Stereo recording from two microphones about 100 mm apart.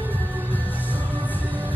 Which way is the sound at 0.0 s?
20° left (ahead or behind).